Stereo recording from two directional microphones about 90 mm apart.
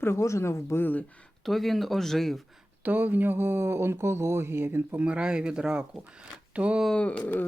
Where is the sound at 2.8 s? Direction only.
20° right (ahead or behind).